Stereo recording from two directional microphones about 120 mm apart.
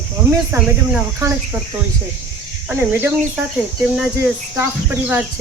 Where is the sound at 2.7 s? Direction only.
15° right (ahead or behind).